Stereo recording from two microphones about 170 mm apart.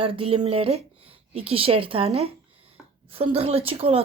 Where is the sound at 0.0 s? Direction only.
35° right (ahead or behind).